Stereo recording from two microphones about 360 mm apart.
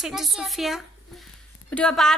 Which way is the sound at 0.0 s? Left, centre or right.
Centre.